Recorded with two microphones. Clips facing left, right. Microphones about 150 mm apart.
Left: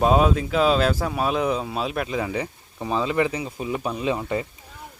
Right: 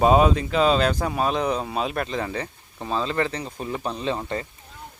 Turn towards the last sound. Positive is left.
turn(degrees=10)  # may be behind; listen again after turning